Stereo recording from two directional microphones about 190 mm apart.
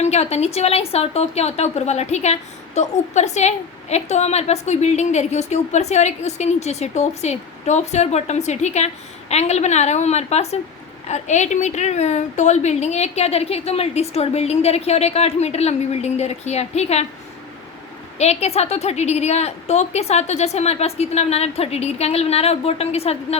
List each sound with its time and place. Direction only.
0.0 s a woman's voice: 35° left (ahead or behind)
18.2 s a woman's voice: 35° left (ahead or behind)